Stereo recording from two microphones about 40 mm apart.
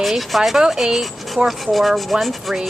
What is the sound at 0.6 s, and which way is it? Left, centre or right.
Speech, centre.